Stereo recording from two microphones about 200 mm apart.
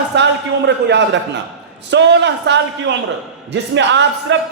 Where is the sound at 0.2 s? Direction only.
60° right (ahead or behind).